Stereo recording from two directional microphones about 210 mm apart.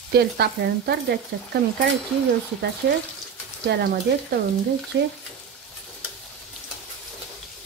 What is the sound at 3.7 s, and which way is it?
A woman's voice, 50° right (ahead or behind).